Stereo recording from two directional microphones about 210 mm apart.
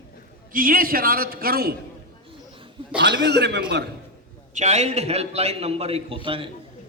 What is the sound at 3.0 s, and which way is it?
Speech, 55° right (ahead or behind).